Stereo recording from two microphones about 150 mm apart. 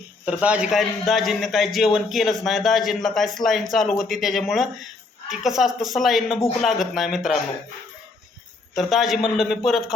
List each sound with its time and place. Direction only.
0.3 s a man's voice: 10° right (ahead or behind)
8.7 s a man's voice: centre (ahead or behind)